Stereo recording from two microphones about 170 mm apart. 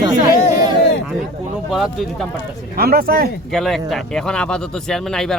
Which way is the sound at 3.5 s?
Centre (ahead or behind).